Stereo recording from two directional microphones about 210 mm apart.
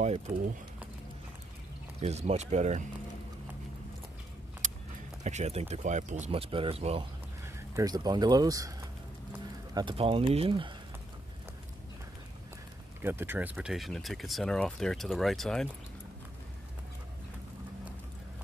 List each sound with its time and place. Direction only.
0.0 s speech: 35° right (ahead or behind)
2.0 s speech: 30° right (ahead or behind)
4.6 s vehicle: 40° right (ahead or behind)
5.2 s speech: 30° right (ahead or behind); by 8.7 s 15° right (ahead or behind)
9.8 s speech: 25° right (ahead or behind)
13.0 s speech: 10° right (ahead or behind)